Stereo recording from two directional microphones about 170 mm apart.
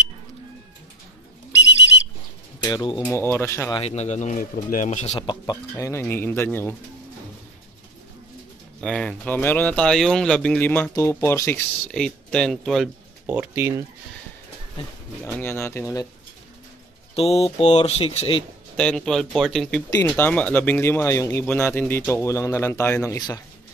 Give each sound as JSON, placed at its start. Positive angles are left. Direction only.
{"t": 2.6, "sound": "speech", "side_deg": 25}
{"t": 3.1, "sound": "speech", "side_deg": 15}
{"t": 3.7, "sound": "speech", "side_deg": 40}
{"t": 5.1, "sound": "speech", "side_deg": 25}
{"t": 8.8, "sound": "speech", "side_deg": 5}
{"t": 11.9, "sound": "speech", "side_deg": 5}
{"t": 15.2, "sound": "speech", "side_deg": 15}
{"t": 17.1, "sound": "speech", "side_deg": 35}
{"t": 18.8, "sound": "speech", "side_deg": 5}